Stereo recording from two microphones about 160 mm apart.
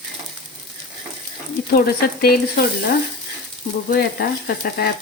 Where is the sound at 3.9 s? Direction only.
80° left.